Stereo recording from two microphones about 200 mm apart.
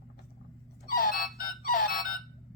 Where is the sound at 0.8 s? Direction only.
45° left (ahead or behind).